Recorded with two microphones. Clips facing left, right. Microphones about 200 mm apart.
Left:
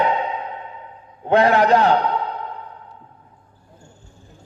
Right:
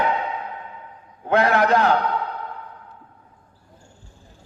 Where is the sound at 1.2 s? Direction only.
35° left (ahead or behind).